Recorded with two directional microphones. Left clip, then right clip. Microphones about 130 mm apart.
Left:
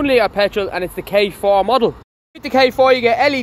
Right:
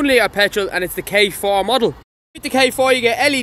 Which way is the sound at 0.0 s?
45° right (ahead or behind).